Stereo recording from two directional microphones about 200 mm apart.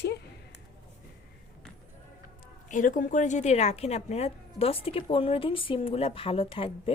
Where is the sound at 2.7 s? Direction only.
40° left (ahead or behind).